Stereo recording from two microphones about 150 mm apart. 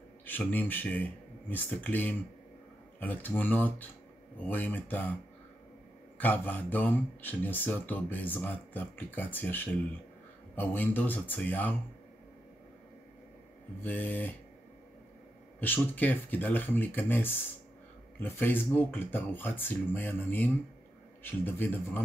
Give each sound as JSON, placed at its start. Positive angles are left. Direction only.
{"t": 0.2, "sound": "speech", "side_deg": 10}
{"t": 6.1, "sound": "speech", "side_deg": 10}
{"t": 13.8, "sound": "speech", "side_deg": 10}
{"t": 15.6, "sound": "speech", "side_deg": 10}